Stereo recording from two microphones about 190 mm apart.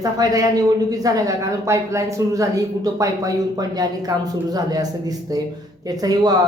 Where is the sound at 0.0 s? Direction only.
20° right (ahead or behind).